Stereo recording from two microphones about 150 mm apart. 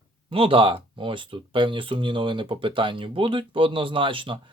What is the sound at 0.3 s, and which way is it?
Speech, 35° right (ahead or behind).